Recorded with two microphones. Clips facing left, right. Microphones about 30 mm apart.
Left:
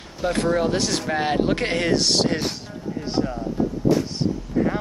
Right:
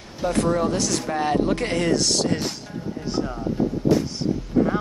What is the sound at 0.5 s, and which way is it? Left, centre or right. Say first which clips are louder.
Speech: left 2 dB; left.